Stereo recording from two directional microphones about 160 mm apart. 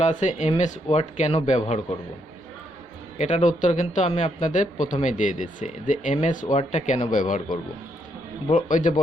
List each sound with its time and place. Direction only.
0.0 s speech: 50° left (ahead or behind)
3.2 s speech: 50° left (ahead or behind)
8.7 s speech: 55° left (ahead or behind)